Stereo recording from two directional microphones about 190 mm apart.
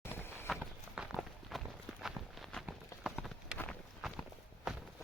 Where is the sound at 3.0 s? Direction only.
Centre (ahead or behind).